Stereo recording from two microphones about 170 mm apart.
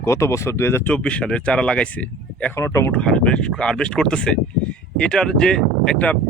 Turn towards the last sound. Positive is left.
turn(degrees=10)  # may be behind; listen again after turning